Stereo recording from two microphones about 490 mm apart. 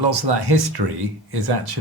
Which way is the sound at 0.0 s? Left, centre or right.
Right.